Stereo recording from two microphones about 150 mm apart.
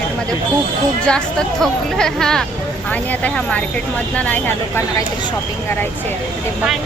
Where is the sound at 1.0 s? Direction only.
5° left (ahead or behind).